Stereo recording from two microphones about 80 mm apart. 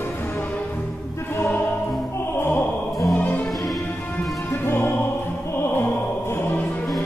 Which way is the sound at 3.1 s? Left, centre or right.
Left.